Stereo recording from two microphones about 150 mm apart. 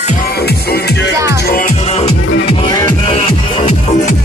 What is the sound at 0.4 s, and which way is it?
Music, 90° left.